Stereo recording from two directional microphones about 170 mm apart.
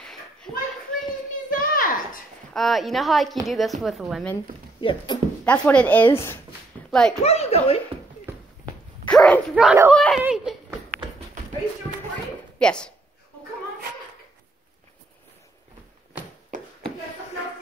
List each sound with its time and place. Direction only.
0.0 s a sound: 5° left (ahead or behind)
1.6 s a sound: 55° left (ahead or behind)
2.5 s a woman's voice: centre (ahead or behind)
4.7 s speech: 30° left (ahead or behind)
5.4 s speech: 10° left (ahead or behind)
6.9 s a child's voice: 5° left (ahead or behind)
7.2 s speech: 35° left (ahead or behind)
9.0 s speech: 5° left (ahead or behind)
10.2 s a sound: 5° right (ahead or behind)
12.5 s speech: 5° left (ahead or behind)